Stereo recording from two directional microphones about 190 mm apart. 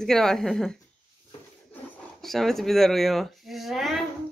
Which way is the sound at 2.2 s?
Centre (ahead or behind).